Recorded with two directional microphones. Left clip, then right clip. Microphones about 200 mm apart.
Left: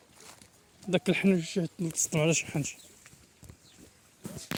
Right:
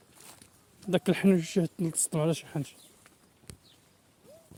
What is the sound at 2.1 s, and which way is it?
Speech, 5° left (ahead or behind).